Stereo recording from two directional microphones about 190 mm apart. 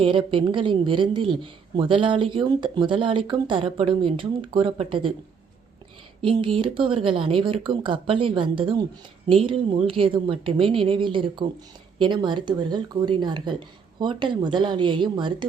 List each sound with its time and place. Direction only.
0.0 s speech: 25° right (ahead or behind)
6.2 s speech: 25° right (ahead or behind)